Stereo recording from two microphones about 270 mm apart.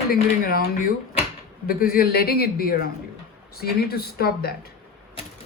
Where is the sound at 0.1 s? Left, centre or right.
Left.